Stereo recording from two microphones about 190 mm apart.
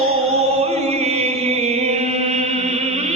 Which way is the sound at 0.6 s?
35° right (ahead or behind).